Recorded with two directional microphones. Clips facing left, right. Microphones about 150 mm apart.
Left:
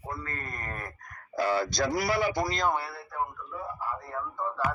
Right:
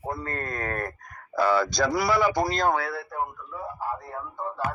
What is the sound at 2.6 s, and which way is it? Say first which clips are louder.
Speech: right 4 dB; 90° right.